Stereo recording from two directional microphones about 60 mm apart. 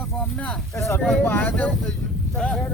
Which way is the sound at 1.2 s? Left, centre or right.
Left.